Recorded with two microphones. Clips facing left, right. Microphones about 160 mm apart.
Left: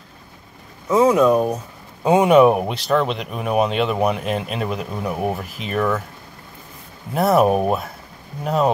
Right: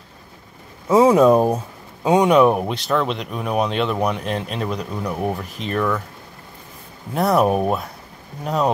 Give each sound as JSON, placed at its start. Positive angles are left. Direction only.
{"t": 0.8, "sound": "speech", "side_deg": -30}
{"t": 2.0, "sound": "speech", "side_deg": 0}
{"t": 7.2, "sound": "speech", "side_deg": 0}